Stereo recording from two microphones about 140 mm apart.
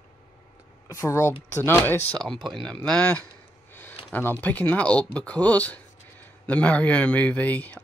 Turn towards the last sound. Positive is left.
turn(degrees=10)  # may be behind; listen again after turning